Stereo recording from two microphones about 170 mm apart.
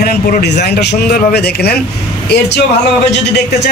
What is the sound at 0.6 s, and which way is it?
Speech, 80° left.